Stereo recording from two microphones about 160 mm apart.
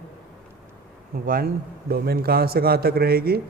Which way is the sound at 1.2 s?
65° right (ahead or behind).